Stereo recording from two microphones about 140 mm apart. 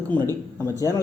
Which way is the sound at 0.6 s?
25° left (ahead or behind).